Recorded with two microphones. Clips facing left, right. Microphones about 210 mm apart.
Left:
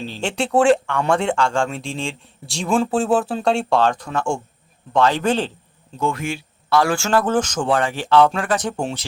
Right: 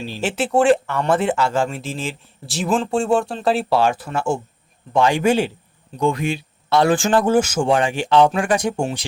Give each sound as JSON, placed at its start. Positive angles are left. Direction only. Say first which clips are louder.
{"t": 0.0, "sound": "speech", "louder": "right 1 dB", "side_deg": -10}